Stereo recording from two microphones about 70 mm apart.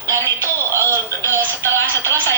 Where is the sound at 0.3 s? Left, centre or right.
Left.